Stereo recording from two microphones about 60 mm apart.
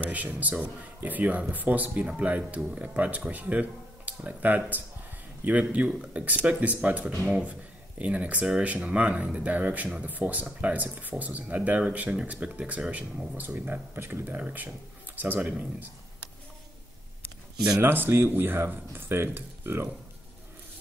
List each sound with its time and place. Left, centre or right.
0.1 s speech: right
17.8 s speech: right